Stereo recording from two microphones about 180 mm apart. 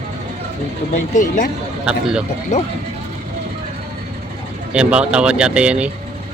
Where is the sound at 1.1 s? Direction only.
45° left (ahead or behind).